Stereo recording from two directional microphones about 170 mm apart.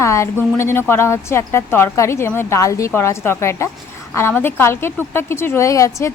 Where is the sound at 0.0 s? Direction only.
15° left (ahead or behind).